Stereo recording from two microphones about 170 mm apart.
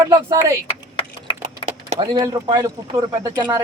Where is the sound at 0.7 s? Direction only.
30° left (ahead or behind).